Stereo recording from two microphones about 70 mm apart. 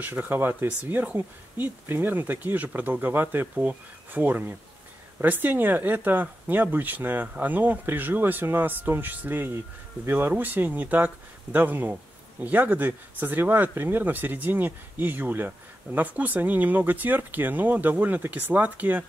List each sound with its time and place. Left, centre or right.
0.0 s speech: right